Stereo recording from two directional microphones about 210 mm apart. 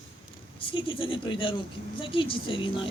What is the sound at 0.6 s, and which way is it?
A woman's voice, 25° left (ahead or behind).